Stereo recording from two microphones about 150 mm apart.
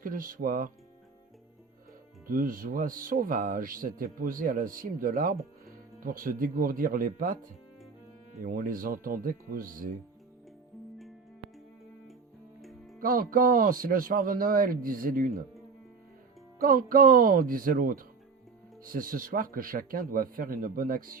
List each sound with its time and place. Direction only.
0.0 s speech: 65° right (ahead or behind)
2.2 s speech: 70° right (ahead or behind)
8.4 s speech: 70° right (ahead or behind)
13.0 s speech: 70° right (ahead or behind)
16.6 s speech: 70° right (ahead or behind)